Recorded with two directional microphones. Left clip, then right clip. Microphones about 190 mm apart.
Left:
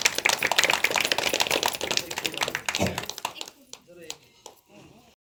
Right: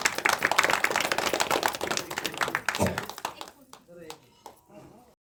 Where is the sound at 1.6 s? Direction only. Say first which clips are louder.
Left 2 dB; 40° right (ahead or behind).